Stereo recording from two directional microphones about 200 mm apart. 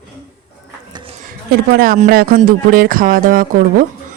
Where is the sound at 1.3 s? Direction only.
45° right (ahead or behind).